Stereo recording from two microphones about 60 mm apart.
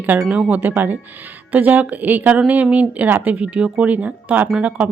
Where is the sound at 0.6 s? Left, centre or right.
Right.